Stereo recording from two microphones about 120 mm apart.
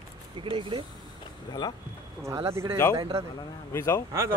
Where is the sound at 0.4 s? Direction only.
45° right (ahead or behind).